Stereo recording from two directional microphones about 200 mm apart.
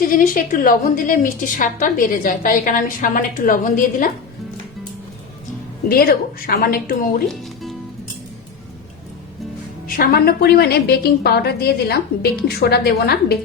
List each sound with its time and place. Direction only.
0.1 s a woman's voice: 40° left (ahead or behind)
5.9 s a woman's voice: 45° left (ahead or behind)
7.3 s music: centre (ahead or behind)
9.8 s a woman's voice: 45° left (ahead or behind)